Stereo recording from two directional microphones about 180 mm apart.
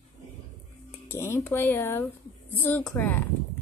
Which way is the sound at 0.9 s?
15° left (ahead or behind).